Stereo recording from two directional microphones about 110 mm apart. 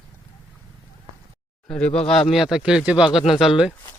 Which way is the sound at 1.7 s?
10° left (ahead or behind).